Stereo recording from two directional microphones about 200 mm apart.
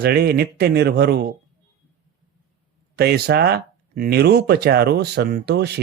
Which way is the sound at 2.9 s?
55° right (ahead or behind).